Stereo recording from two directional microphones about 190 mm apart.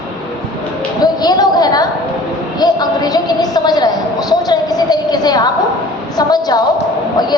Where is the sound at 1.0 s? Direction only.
20° left (ahead or behind).